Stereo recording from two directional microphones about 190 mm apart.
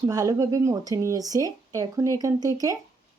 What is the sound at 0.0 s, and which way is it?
Speech, 20° right (ahead or behind).